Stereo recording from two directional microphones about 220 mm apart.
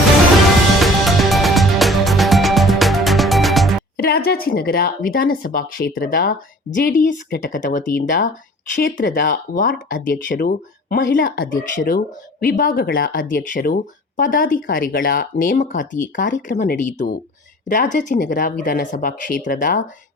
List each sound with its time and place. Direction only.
0.8 s music: centre (ahead or behind)
3.9 s speech: 45° left (ahead or behind)